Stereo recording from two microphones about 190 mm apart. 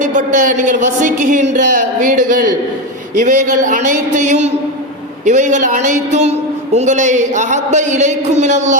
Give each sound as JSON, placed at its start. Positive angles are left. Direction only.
{"t": 0.0, "sound": "a woman's voice", "side_deg": -40}